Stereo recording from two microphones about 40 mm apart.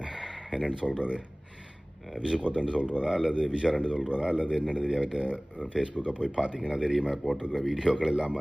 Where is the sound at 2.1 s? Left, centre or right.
Right.